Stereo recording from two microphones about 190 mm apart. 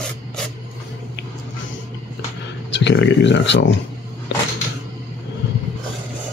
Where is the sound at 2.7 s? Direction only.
70° left (ahead or behind).